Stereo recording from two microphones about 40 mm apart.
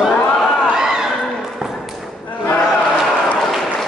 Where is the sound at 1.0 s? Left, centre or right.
Centre.